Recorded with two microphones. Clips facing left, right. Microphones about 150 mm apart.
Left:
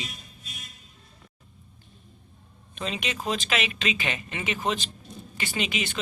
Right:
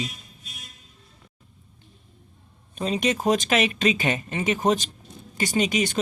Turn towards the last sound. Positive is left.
turn(degrees=-45)  # may be behind; listen again after turning